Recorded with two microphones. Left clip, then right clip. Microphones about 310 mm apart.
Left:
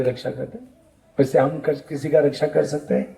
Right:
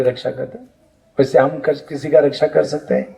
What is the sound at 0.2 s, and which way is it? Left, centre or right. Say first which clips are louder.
A man's voice: right 5 dB; right.